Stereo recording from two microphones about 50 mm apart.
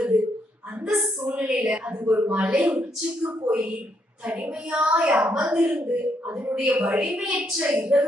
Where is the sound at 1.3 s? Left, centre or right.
Right.